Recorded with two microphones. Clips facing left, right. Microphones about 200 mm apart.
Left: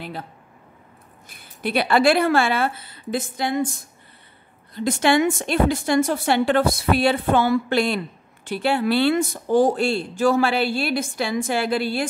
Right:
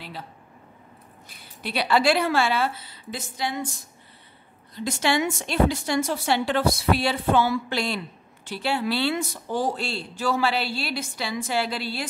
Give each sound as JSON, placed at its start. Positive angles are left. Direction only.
{"t": 1.3, "sound": "speech", "side_deg": 55}
{"t": 4.7, "sound": "speech", "side_deg": 55}